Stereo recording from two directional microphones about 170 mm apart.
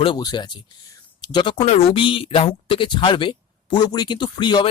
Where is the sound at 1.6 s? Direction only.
40° left (ahead or behind).